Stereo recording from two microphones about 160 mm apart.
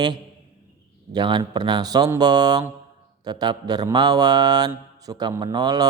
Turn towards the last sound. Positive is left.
turn(degrees=-25)  # may be behind; listen again after turning